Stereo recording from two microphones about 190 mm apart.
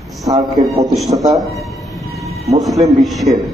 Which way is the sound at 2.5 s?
35° right (ahead or behind).